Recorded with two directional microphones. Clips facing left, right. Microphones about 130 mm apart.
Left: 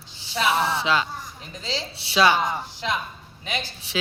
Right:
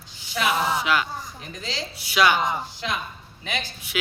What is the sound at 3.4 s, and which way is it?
Speech, 30° left (ahead or behind).